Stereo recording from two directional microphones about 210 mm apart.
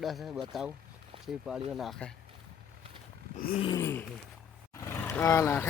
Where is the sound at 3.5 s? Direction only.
25° left (ahead or behind).